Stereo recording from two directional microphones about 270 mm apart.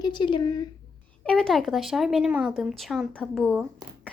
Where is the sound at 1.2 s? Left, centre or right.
Centre.